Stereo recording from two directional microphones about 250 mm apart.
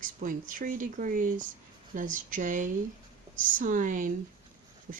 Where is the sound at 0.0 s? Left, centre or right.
Right.